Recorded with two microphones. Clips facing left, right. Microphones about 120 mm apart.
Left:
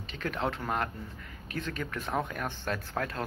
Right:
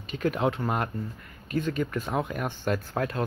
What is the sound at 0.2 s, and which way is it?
Speech, 10° right (ahead or behind).